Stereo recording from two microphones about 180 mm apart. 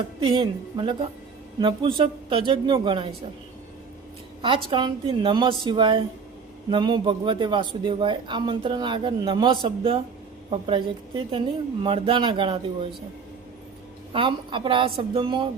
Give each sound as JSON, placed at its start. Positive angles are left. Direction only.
{"t": 0.2, "sound": "speech", "side_deg": -25}
{"t": 4.4, "sound": "speech", "side_deg": -25}
{"t": 14.1, "sound": "speech", "side_deg": -30}